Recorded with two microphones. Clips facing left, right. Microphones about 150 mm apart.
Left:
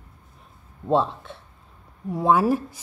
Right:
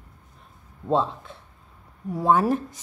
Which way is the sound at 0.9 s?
25° left (ahead or behind).